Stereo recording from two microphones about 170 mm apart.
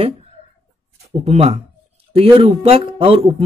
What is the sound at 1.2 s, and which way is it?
Speech, 35° right (ahead or behind).